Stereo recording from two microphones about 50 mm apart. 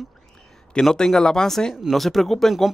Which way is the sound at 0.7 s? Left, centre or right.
Centre.